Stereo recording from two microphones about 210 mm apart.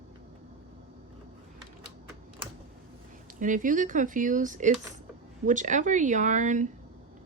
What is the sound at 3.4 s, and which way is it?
Speech, 40° right (ahead or behind).